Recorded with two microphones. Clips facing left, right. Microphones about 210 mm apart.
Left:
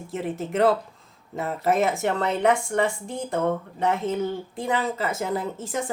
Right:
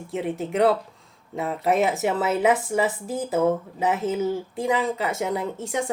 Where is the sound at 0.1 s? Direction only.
Centre (ahead or behind).